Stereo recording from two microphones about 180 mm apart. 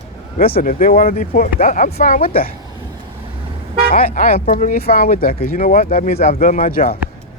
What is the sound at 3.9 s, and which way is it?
Speech, 50° left (ahead or behind).